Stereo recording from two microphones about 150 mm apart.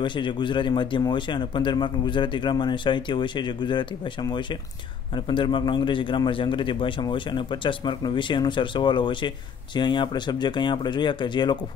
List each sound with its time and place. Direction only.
0.0 s speech: 30° left (ahead or behind)